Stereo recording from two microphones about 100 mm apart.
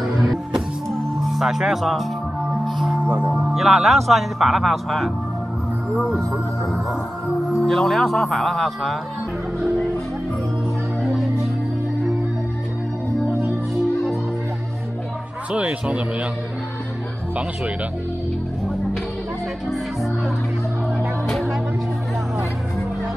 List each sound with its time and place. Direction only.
0.0 s music: centre (ahead or behind)
1.2 s speech: centre (ahead or behind)
7.5 s speech: centre (ahead or behind)
11.0 s music: centre (ahead or behind)
13.3 s music: 20° right (ahead or behind)
15.5 s speech: 10° right (ahead or behind)
21.3 s music: 5° left (ahead or behind)